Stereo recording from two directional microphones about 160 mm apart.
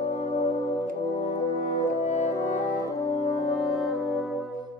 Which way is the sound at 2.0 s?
45° left (ahead or behind).